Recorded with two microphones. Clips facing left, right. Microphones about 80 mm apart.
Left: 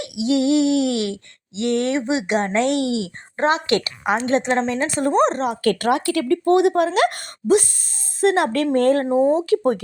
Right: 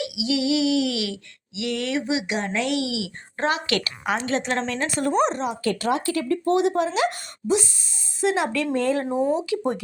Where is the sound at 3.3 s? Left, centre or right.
Left.